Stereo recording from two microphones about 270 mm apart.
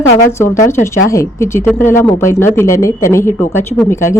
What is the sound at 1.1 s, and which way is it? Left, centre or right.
Speech, centre.